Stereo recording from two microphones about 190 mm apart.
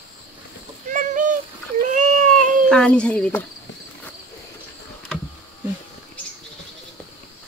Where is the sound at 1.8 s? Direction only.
40° right (ahead or behind).